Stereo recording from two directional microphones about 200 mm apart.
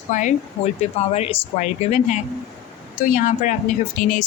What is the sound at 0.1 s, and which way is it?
Speech, 40° left (ahead or behind).